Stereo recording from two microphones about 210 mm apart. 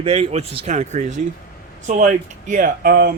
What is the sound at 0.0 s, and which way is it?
Speech, 25° right (ahead or behind).